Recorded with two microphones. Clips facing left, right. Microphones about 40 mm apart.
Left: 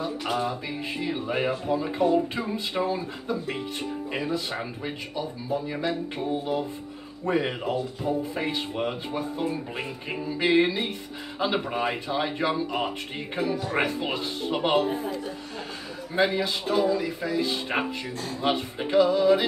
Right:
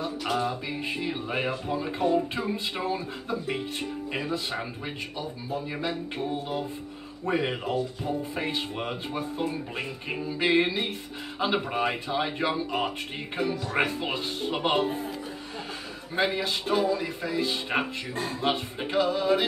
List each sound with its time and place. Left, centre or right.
0.3 s speech: centre
16.2 s speech: centre